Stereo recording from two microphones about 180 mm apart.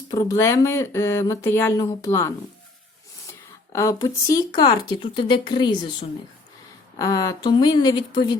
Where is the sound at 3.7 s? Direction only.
15° left (ahead or behind).